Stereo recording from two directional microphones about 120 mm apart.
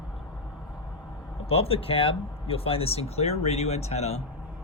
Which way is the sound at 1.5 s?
55° left (ahead or behind).